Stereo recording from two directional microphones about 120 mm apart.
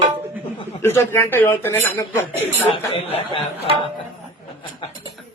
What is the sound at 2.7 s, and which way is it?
Speech, 55° left (ahead or behind).